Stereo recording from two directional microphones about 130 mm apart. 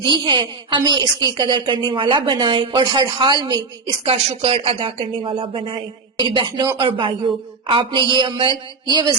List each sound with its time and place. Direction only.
0.0 s a woman's voice: 40° right (ahead or behind)
4.0 s a woman's voice: 45° right (ahead or behind)